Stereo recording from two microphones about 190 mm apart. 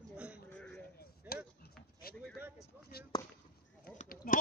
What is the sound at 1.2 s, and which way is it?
Chop, 10° right (ahead or behind).